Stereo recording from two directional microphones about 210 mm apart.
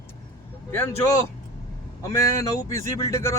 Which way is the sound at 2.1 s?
15° left (ahead or behind).